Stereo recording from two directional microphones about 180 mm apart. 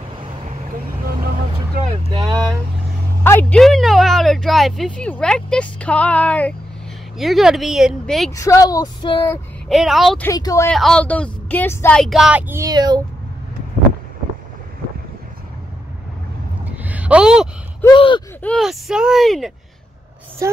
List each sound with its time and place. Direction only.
3.3 s speech: 10° left (ahead or behind)
8.4 s child singing: 20° left (ahead or behind)
9.7 s speech: centre (ahead or behind)
10.2 s a woman's voice: 20° left (ahead or behind)
10.7 s a woman's voice: 5° left (ahead or behind)
12.0 s speech: centre (ahead or behind); by 13.0 s 25° right (ahead or behind)
16.7 s a sound: 10° right (ahead or behind)
17.8 s a sound: 30° left (ahead or behind)
18.4 s speech: 5° left (ahead or behind)